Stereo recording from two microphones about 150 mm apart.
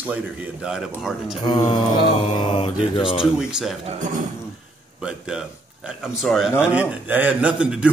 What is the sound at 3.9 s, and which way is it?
Speech, 55° right (ahead or behind).